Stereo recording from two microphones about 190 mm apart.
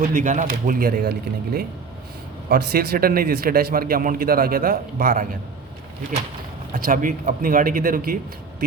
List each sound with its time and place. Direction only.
0.1 s speech: 45° right (ahead or behind)
2.5 s speech: 55° right (ahead or behind)
6.7 s speech: 45° right (ahead or behind)